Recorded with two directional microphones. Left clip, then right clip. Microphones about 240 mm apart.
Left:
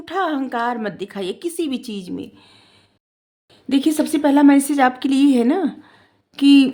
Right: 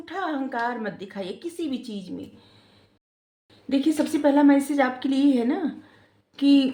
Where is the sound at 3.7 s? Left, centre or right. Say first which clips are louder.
Left 5 dB; left.